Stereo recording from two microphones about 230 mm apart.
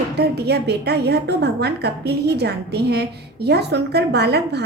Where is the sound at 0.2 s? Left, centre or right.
Right.